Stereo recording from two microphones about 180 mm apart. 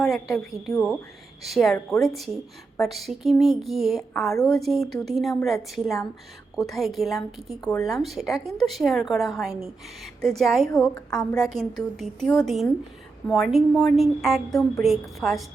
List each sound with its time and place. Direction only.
0.0 s a woman's voice: centre (ahead or behind)
7.6 s speech: 20° left (ahead or behind)
7.9 s a woman's voice: centre (ahead or behind)
10.7 s a woman's voice: 15° left (ahead or behind)
11.1 s a woman's voice: 5° left (ahead or behind)